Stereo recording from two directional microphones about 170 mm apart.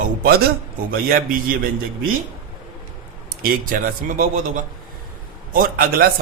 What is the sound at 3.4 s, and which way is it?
A man's voice, 55° right (ahead or behind).